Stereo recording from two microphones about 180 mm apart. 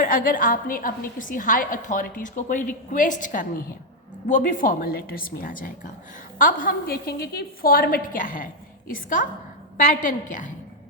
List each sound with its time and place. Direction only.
0.0 s a woman's voice: 50° left (ahead or behind)